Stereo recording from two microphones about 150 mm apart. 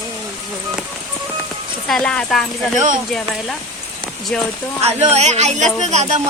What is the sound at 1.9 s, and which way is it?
Speech, 5° left (ahead or behind).